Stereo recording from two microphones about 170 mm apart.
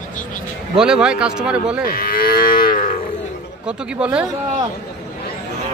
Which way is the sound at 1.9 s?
60° left (ahead or behind).